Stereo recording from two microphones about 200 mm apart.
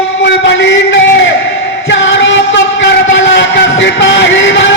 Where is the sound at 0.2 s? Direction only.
60° left (ahead or behind).